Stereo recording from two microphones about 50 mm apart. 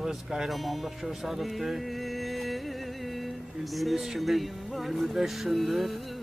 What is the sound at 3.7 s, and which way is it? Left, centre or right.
Speech, centre.